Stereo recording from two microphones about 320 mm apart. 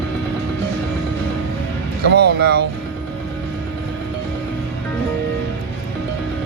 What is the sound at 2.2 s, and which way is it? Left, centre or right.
Speech, right.